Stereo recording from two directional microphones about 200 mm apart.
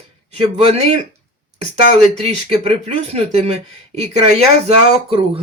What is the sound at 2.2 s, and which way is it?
Speech, 30° right (ahead or behind).